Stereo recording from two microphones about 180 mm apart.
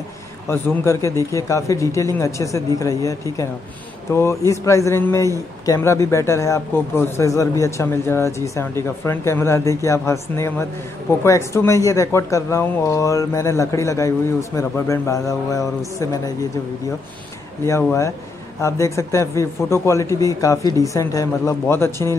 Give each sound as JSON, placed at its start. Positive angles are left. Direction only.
{"t": 0.5, "sound": "speech", "side_deg": 15}
{"t": 18.6, "sound": "speech", "side_deg": 15}